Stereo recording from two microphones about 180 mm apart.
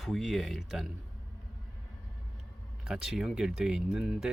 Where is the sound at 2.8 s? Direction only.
5° right (ahead or behind).